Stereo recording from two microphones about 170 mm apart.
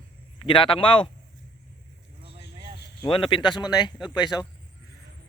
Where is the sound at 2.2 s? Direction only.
30° right (ahead or behind).